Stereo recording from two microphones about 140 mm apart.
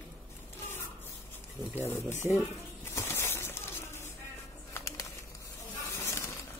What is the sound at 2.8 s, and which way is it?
Bird, 15° left (ahead or behind).